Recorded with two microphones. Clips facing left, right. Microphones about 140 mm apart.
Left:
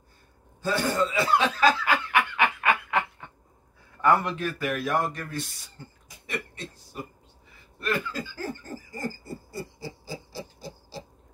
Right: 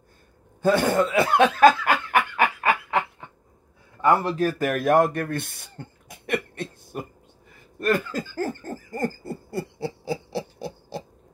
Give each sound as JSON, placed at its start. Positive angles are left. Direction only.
{"t": 0.6, "sound": "snicker", "side_deg": -55}
{"t": 4.0, "sound": "a sound", "side_deg": -30}
{"t": 7.8, "sound": "owl", "side_deg": -45}